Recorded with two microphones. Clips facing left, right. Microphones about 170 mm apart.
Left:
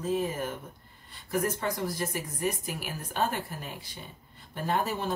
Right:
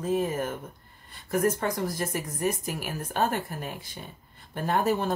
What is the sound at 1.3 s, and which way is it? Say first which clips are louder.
Speech: right 4 dB; 50° right (ahead or behind).